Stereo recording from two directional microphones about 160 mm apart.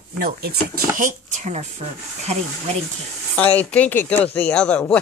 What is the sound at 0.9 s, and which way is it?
Speech, 50° right (ahead or behind).